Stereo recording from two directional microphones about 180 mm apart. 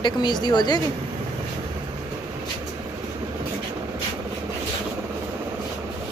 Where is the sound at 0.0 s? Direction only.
25° left (ahead or behind).